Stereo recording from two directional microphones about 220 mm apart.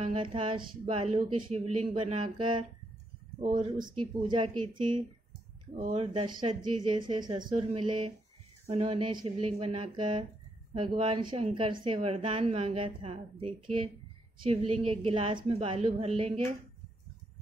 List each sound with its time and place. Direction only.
0.0 s a woman's voice: 25° right (ahead or behind)
4.0 s a woman's voice: 20° right (ahead or behind)
5.8 s speech: 35° right (ahead or behind)
6.1 s a woman's voice: 20° right (ahead or behind)